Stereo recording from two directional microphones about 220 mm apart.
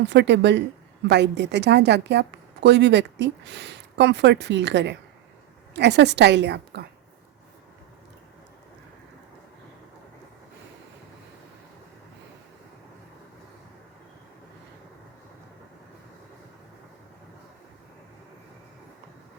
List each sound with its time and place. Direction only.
0.1 s a woman's voice: 50° right (ahead or behind)